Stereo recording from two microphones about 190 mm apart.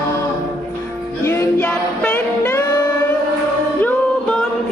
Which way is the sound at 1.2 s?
10° left (ahead or behind).